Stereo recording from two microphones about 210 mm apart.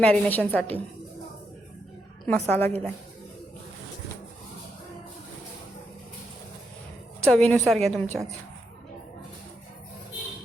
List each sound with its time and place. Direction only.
0.0 s a woman's voice: 5° left (ahead or behind)
2.2 s a woman's voice: 10° left (ahead or behind)
7.2 s a woman's voice: 5° left (ahead or behind)